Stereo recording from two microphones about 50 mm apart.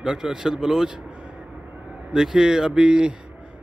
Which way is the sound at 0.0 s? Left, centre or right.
Centre.